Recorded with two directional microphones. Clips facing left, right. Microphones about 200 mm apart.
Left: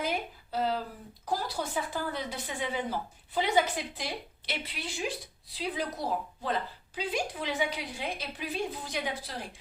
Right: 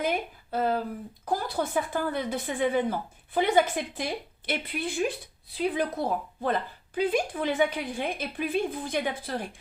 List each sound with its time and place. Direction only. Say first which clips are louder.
0.5 s a woman's voice: right 4 dB; 55° right (ahead or behind)